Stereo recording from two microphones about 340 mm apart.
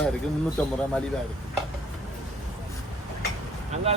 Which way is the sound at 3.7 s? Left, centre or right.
Centre.